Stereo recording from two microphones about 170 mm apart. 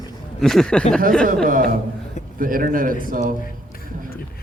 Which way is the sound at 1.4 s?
55° right (ahead or behind).